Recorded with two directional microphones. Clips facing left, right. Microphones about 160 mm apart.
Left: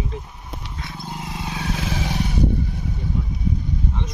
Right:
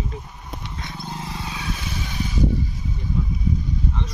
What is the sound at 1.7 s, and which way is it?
Vehicle, 90° left.